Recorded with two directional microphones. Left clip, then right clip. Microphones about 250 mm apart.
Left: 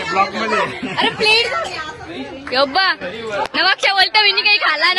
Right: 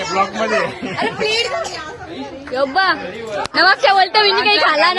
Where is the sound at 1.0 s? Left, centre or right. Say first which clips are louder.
Left 4 dB; left.